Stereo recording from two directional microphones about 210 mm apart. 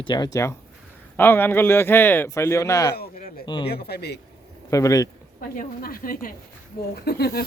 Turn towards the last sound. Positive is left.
turn(degrees=50)  # may be behind; listen again after turning